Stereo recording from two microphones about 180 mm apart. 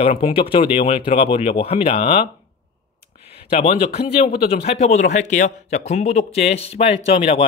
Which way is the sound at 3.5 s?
35° left (ahead or behind).